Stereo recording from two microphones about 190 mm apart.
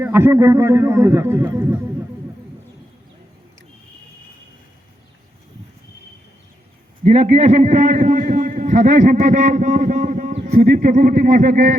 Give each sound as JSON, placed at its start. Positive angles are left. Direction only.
{"t": 0.0, "sound": "a man's voice", "side_deg": -10}
{"t": 7.0, "sound": "a man's voice", "side_deg": -35}